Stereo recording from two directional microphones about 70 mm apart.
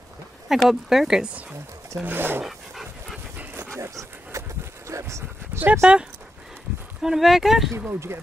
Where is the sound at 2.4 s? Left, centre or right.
Centre.